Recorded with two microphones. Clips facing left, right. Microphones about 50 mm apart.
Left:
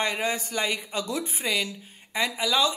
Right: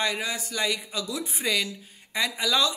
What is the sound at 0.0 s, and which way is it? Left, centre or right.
Speech, left.